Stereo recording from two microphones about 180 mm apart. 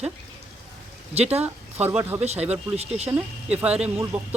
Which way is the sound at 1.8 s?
10° right (ahead or behind).